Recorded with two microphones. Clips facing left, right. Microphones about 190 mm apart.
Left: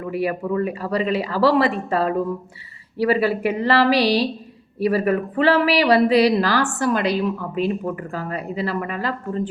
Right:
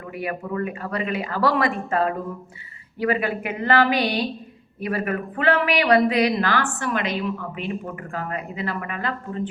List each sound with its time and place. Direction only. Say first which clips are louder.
0.1 s speech: left 6 dB; 30° left (ahead or behind)